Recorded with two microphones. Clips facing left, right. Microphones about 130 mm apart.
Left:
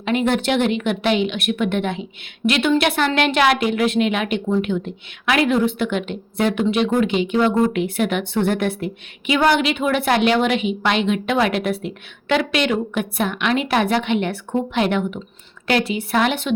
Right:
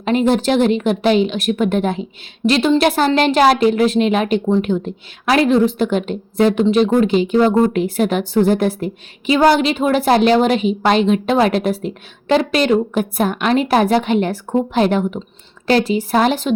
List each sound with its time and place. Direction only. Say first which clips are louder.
0.0 s a woman's voice: right 4 dB; 35° right (ahead or behind)